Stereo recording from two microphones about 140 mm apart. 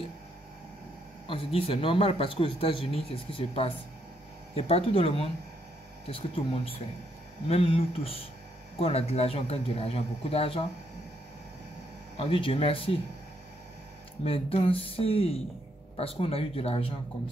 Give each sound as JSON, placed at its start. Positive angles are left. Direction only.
{"t": 1.2, "sound": "speech", "side_deg": 40}
{"t": 12.2, "sound": "speech", "side_deg": 40}
{"t": 14.2, "sound": "speech", "side_deg": 45}